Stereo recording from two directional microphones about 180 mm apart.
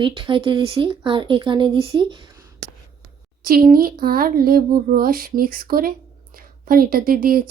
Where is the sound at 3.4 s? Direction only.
55° right (ahead or behind).